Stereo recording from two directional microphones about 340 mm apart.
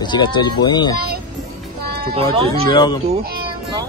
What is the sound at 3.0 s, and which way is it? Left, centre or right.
Speech, right.